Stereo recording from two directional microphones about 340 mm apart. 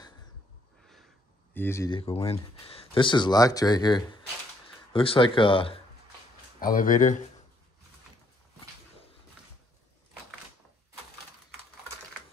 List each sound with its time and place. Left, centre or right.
1.5 s speech: centre; by 7.2 s left